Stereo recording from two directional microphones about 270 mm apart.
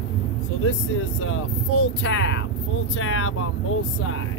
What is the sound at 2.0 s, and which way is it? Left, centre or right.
Speech, left.